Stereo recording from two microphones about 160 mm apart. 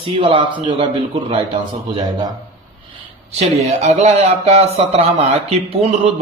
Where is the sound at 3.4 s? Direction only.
45° right (ahead or behind).